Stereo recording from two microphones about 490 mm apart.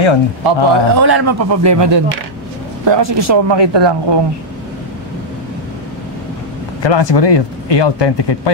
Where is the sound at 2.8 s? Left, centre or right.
Right.